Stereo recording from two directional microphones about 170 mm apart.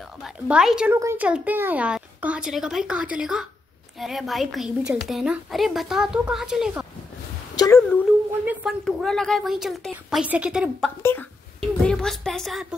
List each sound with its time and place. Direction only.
0.2 s a woman's voice: 5° right (ahead or behind)
7.5 s a sound: 15° left (ahead or behind)
8.5 s a woman's voice: centre (ahead or behind)
11.0 s speech: 15° left (ahead or behind)
11.6 s a woman's voice: 5° left (ahead or behind)